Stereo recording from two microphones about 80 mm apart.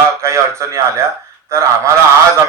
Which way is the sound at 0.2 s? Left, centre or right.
Right.